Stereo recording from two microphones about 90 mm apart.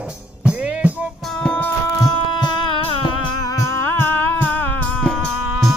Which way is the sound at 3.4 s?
40° left (ahead or behind).